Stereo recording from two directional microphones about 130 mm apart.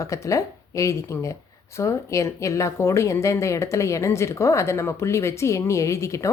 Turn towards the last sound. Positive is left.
turn(degrees=25)  # may be behind; listen again after turning